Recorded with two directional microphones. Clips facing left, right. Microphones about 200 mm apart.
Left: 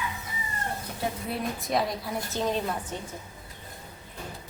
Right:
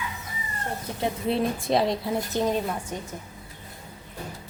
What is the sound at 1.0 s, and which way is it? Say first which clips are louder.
A woman's voice: right 7 dB; 25° right (ahead or behind).